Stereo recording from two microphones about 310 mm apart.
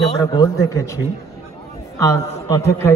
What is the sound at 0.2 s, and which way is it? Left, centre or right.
Speech, centre.